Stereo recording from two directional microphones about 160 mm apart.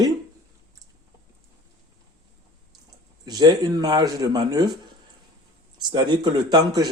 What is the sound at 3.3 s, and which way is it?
Speech, 25° right (ahead or behind).